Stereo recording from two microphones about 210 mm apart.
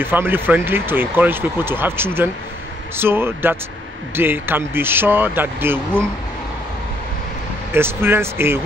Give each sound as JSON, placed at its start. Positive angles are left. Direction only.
{"t": 0.0, "sound": "speech", "side_deg": -10}
{"t": 7.7, "sound": "speech", "side_deg": -10}